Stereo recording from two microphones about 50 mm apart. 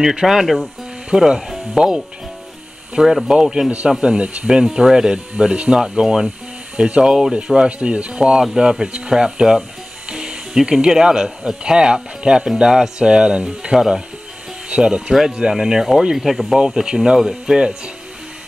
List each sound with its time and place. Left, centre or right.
0.0 s speech: centre
3.0 s speech: centre
4.0 s speech: right
16.3 s speech: centre
16.5 s speech: centre